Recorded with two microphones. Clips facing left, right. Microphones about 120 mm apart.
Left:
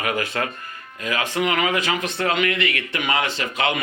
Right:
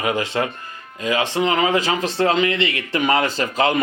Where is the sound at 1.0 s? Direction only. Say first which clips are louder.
Right 3 dB; 25° right (ahead or behind).